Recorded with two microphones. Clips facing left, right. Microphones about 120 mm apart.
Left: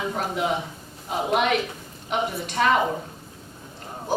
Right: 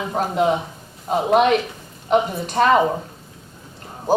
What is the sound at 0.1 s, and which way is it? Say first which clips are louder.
Speech: right 7 dB; 35° right (ahead or behind).